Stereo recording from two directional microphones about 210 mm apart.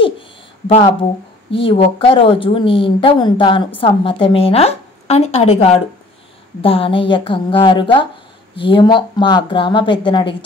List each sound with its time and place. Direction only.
1.5 s speech: 25° left (ahead or behind)